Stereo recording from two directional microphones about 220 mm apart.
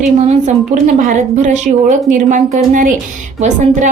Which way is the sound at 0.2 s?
30° right (ahead or behind).